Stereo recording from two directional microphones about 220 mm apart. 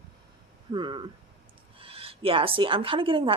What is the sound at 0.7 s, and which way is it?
A woman's voice, 20° right (ahead or behind).